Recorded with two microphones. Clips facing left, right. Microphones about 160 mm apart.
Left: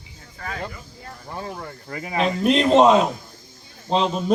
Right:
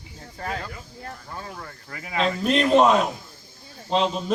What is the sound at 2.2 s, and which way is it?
A man's voice, 15° left (ahead or behind).